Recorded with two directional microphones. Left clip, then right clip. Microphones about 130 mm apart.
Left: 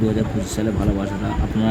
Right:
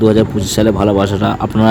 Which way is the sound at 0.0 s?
75° right (ahead or behind).